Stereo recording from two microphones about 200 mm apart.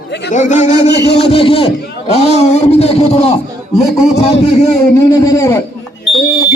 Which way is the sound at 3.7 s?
Centre (ahead or behind).